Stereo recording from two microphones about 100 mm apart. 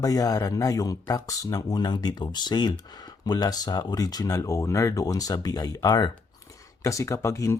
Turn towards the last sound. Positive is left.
turn(degrees=30)  # may be behind; listen again after turning